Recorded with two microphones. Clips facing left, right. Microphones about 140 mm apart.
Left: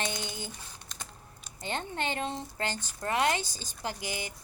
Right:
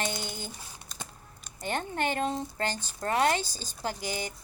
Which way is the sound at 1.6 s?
50° right (ahead or behind).